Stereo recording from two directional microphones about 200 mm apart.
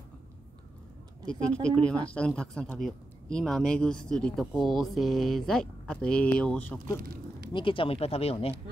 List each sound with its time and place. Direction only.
1.2 s speech: 5° left (ahead or behind)
7.0 s a sound: 50° right (ahead or behind)
7.5 s speech: 25° left (ahead or behind)